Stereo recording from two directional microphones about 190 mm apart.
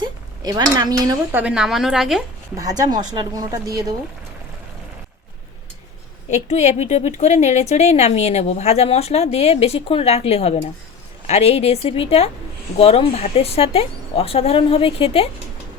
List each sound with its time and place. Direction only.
0.0 s speech: 20° right (ahead or behind); by 2.2 s centre (ahead or behind)
2.6 s speech: 20° right (ahead or behind)
6.3 s speech: 35° left (ahead or behind)